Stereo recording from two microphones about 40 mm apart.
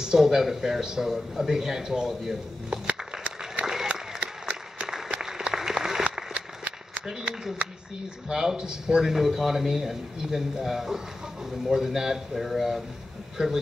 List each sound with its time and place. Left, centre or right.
0.0 s a man's voice: centre
2.7 s a sound: right
3.6 s applause: centre
4.2 s applause: right
4.8 s applause: centre
6.0 s a sound: right
7.6 s speech: right
8.3 s a man's voice: centre
13.4 s speech: centre